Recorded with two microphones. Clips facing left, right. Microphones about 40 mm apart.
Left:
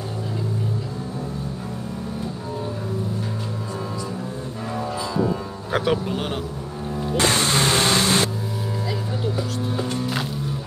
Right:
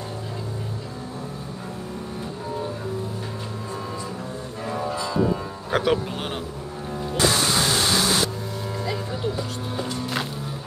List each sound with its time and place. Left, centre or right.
4.7 s music: centre
5.7 s speech: centre
7.2 s music: left
8.8 s a sound: centre